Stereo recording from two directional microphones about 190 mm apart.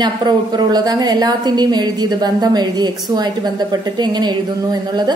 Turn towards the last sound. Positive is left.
turn(degrees=-20)  # may be behind; listen again after turning